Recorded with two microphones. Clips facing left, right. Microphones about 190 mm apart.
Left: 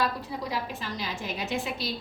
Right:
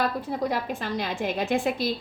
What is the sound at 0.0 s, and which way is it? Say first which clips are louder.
A woman's voice: right 4 dB; 55° right (ahead or behind).